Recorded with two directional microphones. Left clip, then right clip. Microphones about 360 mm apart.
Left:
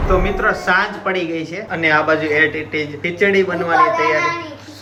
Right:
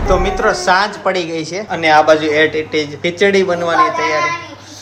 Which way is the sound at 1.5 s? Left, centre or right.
Centre.